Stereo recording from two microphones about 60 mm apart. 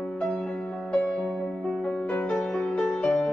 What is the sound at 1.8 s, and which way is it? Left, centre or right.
Music, centre.